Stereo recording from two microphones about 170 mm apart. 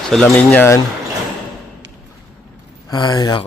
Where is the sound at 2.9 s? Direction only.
25° left (ahead or behind).